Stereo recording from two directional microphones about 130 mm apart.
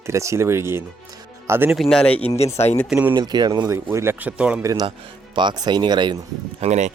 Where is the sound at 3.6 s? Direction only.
20° right (ahead or behind).